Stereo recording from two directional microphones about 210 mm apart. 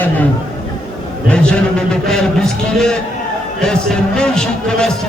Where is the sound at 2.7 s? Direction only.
5° left (ahead or behind).